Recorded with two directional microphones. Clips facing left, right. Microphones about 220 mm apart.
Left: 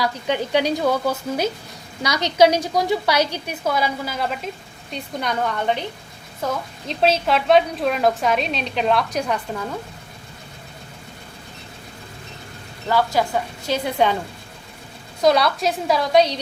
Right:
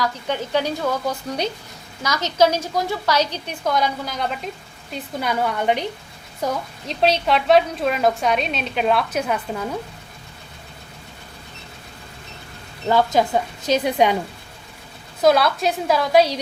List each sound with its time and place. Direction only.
0.0 s a woman's voice: 15° left (ahead or behind); by 6.6 s 15° right (ahead or behind)
6.8 s a woman's voice: centre (ahead or behind)
12.9 s a woman's voice: 20° right (ahead or behind)
15.2 s a woman's voice: centre (ahead or behind)